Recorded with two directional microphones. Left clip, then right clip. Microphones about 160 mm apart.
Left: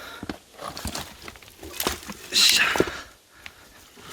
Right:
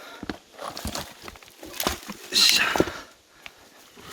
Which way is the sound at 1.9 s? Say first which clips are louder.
Left 1 dB; 35° right (ahead or behind).